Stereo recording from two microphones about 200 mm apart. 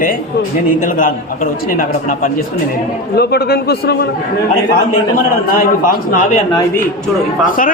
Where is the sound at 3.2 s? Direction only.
55° left (ahead or behind).